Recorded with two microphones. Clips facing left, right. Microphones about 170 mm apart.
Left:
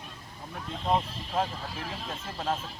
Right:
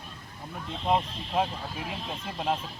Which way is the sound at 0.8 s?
15° right (ahead or behind).